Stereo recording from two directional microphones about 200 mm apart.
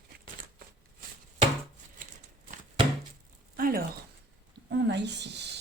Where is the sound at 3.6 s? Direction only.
45° right (ahead or behind).